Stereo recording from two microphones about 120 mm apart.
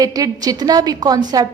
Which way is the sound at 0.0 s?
30° right (ahead or behind).